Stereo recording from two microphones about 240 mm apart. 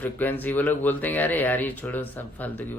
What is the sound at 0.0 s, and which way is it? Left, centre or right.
Speech, centre.